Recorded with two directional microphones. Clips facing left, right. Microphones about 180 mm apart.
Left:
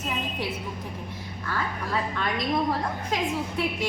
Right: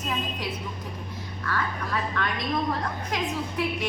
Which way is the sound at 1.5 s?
25° left (ahead or behind).